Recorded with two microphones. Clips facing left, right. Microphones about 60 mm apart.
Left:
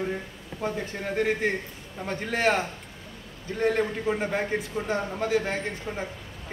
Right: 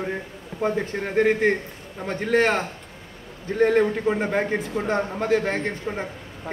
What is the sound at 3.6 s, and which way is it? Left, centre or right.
Speech, right.